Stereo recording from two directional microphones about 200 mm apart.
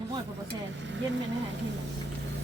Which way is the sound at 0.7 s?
65° right (ahead or behind).